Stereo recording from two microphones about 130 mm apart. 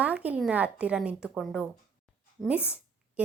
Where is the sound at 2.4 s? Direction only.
10° right (ahead or behind).